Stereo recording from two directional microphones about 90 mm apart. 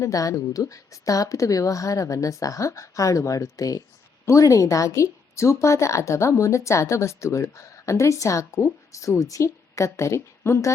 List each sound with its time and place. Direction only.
0.0 s a woman's voice: 40° left (ahead or behind)